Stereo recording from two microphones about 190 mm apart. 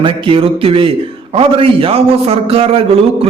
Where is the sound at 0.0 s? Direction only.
25° right (ahead or behind).